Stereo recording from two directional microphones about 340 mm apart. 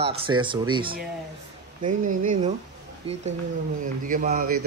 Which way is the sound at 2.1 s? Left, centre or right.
Right.